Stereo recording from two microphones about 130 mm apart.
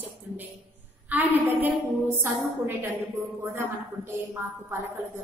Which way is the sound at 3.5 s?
20° right (ahead or behind).